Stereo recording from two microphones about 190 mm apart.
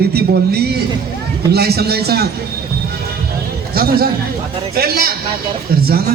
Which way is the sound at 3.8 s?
55° right (ahead or behind).